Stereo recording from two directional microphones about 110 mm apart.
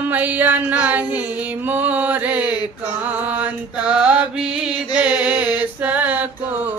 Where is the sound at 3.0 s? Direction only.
15° right (ahead or behind).